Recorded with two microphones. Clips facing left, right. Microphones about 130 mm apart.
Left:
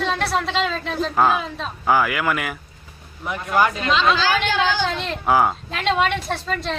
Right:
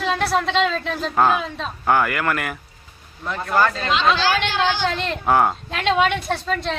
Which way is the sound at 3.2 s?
15° left (ahead or behind).